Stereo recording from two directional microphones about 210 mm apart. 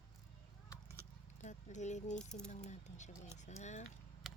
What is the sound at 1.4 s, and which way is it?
Speech, 35° left (ahead or behind).